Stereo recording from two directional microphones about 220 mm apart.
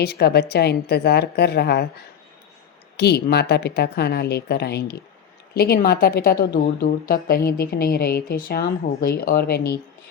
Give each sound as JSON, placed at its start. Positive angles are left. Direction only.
{"t": 0.0, "sound": "a woman's voice", "side_deg": 45}
{"t": 3.0, "sound": "a woman's voice", "side_deg": 50}